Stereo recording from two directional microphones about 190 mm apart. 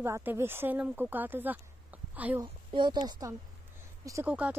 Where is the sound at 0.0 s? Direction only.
10° right (ahead or behind).